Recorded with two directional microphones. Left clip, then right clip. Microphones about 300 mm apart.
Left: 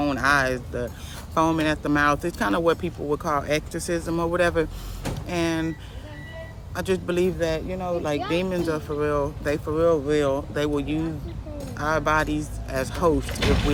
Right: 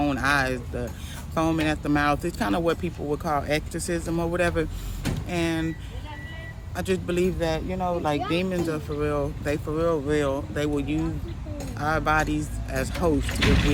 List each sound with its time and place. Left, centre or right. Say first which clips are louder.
0.0 s speech: left 2 dB; centre
6.7 s speech: left 2 dB; centre
13.2 s speech: even; left